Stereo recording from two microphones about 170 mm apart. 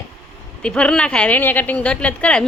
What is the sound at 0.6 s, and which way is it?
A woman's voice, 5° left (ahead or behind).